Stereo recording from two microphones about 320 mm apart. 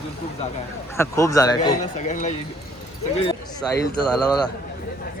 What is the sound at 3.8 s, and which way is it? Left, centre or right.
Speech, centre.